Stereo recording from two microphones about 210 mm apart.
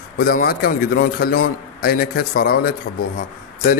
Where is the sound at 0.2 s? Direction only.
45° left (ahead or behind).